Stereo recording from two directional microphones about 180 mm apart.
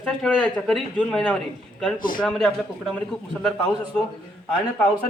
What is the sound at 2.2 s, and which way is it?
Speech, 5° left (ahead or behind).